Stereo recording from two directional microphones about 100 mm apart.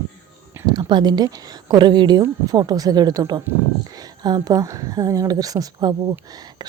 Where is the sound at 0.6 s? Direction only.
45° right (ahead or behind).